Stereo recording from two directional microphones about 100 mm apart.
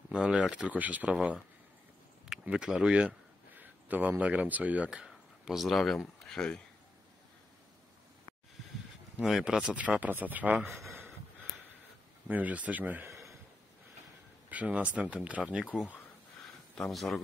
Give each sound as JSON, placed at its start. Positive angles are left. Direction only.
{"t": 0.1, "sound": "speech", "side_deg": -10}
{"t": 2.2, "sound": "speech", "side_deg": -5}
{"t": 9.2, "sound": "speech", "side_deg": -5}
{"t": 12.3, "sound": "speech", "side_deg": -15}
{"t": 13.1, "sound": "a sound", "side_deg": 0}
{"t": 14.5, "sound": "speech", "side_deg": -15}
{"t": 16.7, "sound": "speech", "side_deg": 0}